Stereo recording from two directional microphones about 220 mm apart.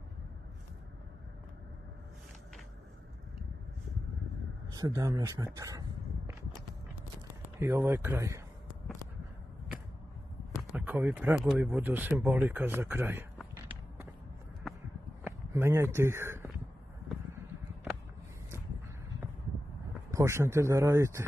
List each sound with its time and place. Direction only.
4.7 s speech: 15° right (ahead or behind)
7.5 s speech: 10° right (ahead or behind)
10.9 s speech: 5° right (ahead or behind)
15.2 s speech: 10° right (ahead or behind)
20.1 s speech: 15° right (ahead or behind)